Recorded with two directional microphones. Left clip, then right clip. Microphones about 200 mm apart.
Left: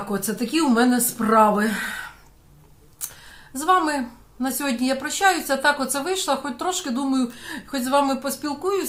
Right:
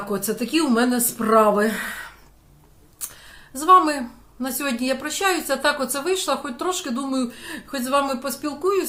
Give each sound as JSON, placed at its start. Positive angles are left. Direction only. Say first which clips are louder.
{"t": 0.1, "sound": "speech", "louder": "right 2 dB", "side_deg": 0}